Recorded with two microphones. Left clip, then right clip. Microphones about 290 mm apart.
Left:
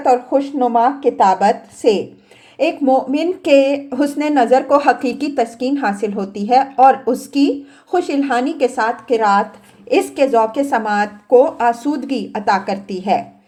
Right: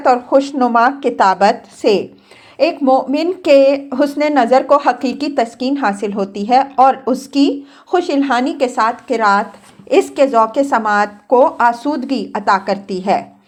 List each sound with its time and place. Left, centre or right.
0.3 s speech: right